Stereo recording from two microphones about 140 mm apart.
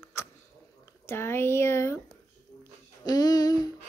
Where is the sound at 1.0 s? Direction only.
15° left (ahead or behind).